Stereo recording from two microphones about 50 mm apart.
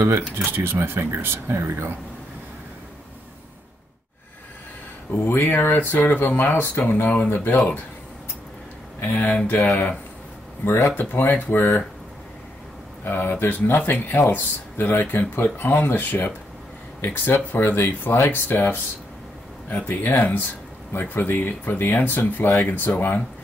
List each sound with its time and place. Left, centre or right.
0.5 s speech: right
5.1 s speech: left
9.0 s speech: left
10.6 s speech: left
13.0 s speech: left
18.1 s speech: left
18.5 s speech: left